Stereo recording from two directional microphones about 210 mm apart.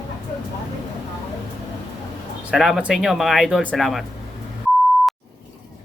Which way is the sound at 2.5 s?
Centre (ahead or behind).